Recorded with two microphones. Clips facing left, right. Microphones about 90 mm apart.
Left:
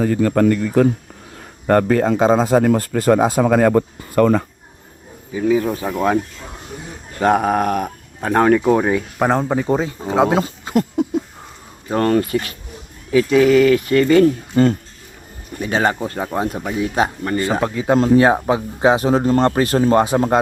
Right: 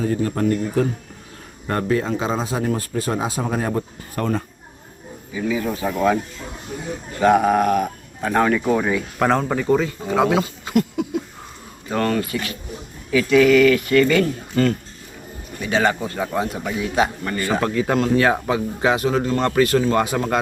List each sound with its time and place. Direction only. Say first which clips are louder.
0.0 s speech: left 5 dB; 85° left
1.6 s speech: left 7 dB; 55° left (ahead or behind)
3.4 s speech: left 9 dB; 90° left
5.3 s speech: left 6 dB; 40° left (ahead or behind)
7.2 s speech: even; 40° left (ahead or behind)
9.1 s speech: even; 15° left (ahead or behind); by 10.3 s 30° left (ahead or behind)
10.3 s a sound: left 2 dB; 40° left (ahead or behind)
11.9 s speech: left 5 dB; 35° left (ahead or behind)
17.6 s speech: left 2 dB; 20° left (ahead or behind)
17.9 s speech: left 7 dB; 30° left (ahead or behind)